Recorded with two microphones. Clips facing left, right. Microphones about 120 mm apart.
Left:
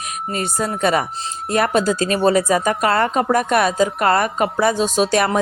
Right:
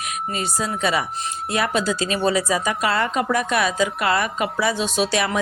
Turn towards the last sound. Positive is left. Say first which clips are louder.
# left 4 dB
turn(degrees=45)  # may be behind; listen again after turning